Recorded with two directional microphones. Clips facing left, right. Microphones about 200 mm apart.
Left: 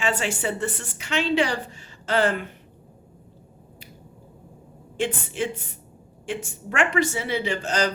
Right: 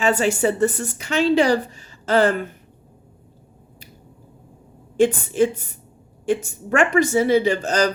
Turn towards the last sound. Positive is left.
turn(degrees=-40)  # may be behind; listen again after turning